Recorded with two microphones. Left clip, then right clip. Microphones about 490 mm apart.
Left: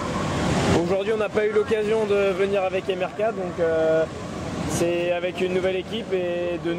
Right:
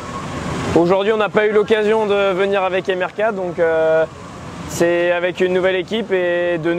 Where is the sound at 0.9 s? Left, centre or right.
Right.